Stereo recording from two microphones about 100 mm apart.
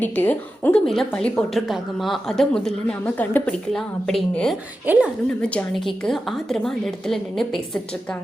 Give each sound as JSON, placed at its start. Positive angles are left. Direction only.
{"t": 0.0, "sound": "a woman's voice", "side_deg": 15}
{"t": 0.9, "sound": "a woman's voice", "side_deg": 5}
{"t": 3.2, "sound": "a woman's voice", "side_deg": 15}
{"t": 3.7, "sound": "a woman's voice", "side_deg": 5}
{"t": 4.9, "sound": "a woman's voice", "side_deg": -15}
{"t": 5.7, "sound": "a woman's voice", "side_deg": 5}